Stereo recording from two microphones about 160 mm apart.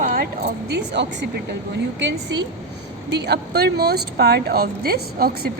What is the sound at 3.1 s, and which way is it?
Speech, 90° right.